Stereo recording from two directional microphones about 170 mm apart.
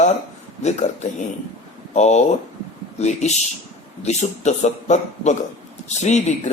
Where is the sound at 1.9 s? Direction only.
40° left (ahead or behind).